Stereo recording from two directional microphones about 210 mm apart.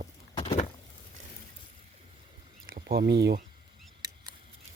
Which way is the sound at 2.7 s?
50° right (ahead or behind).